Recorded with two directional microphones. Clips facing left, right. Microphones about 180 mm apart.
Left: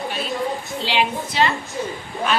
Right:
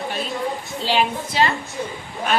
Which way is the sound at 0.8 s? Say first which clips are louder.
Right 2 dB; 40° right (ahead or behind).